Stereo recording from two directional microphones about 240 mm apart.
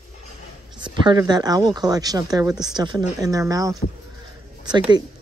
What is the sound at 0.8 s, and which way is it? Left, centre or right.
Speech, centre.